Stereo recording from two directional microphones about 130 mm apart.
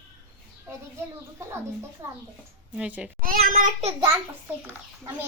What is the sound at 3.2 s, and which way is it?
Speech, 90° right.